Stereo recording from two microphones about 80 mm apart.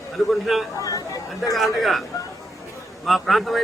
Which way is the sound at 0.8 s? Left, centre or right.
Left.